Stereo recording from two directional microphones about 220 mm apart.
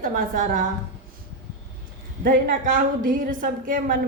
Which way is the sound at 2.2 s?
40° right (ahead or behind).